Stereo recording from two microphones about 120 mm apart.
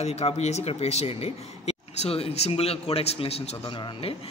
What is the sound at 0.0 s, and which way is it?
Speech, 60° left (ahead or behind).